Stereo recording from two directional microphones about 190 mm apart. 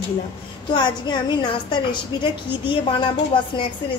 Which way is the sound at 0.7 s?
25° left (ahead or behind).